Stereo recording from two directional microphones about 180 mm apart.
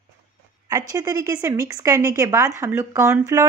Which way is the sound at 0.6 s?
20° right (ahead or behind).